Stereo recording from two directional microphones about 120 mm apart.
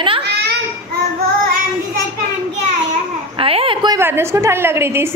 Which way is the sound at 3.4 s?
50° right (ahead or behind).